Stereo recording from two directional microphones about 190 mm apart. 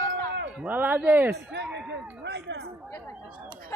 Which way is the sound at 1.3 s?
65° right (ahead or behind).